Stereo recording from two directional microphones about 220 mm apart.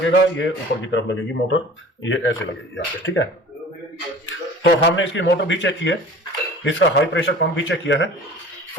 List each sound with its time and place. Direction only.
0.0 s speech: 55° left (ahead or behind)
4.3 s speech: 55° left (ahead or behind)